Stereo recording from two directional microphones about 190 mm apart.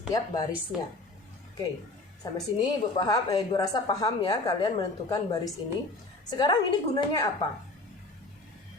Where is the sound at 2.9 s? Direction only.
20° left (ahead or behind).